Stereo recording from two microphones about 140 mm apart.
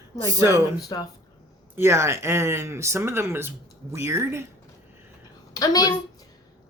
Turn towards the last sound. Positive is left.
turn(degrees=30)  # may be behind; listen again after turning